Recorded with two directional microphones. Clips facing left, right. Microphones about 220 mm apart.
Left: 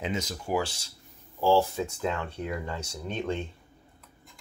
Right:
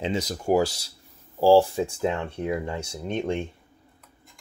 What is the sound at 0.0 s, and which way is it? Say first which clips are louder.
Speech: right 5 dB; 35° right (ahead or behind).